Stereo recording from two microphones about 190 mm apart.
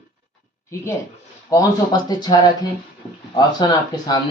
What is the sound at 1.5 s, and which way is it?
Speech, 20° left (ahead or behind).